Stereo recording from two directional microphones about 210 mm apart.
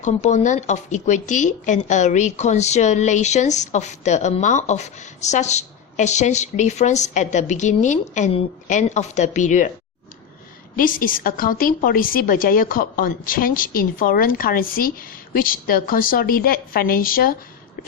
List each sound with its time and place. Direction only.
0.0 s speech: 35° left (ahead or behind)
10.8 s a woman's voice: 40° left (ahead or behind)